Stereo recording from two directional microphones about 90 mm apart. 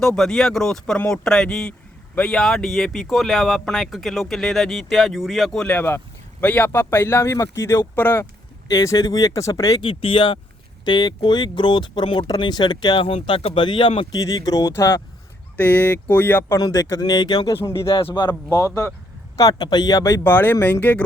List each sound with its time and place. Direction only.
0.0 s a man's voice: 5° left (ahead or behind)
5.6 s speech: 25° left (ahead or behind)
8.7 s speech: 40° left (ahead or behind)
9.8 s speech: 80° left
12.4 s speech: 55° left (ahead or behind); by 14.1 s 75° left (ahead or behind)
14.1 s speech: 40° left (ahead or behind)
15.5 s speech: 20° left (ahead or behind)
16.5 s speech: 45° left (ahead or behind)
17.5 s speech: 30° left (ahead or behind)
17.8 s speech: 90° left
18.1 s speech: 55° left (ahead or behind)
18.5 s speech: 35° left (ahead or behind)
20.2 s speech: 20° left (ahead or behind)